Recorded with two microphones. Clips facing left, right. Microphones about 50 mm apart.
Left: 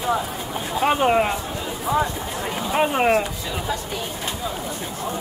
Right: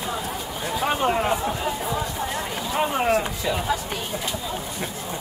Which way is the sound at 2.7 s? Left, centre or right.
Left.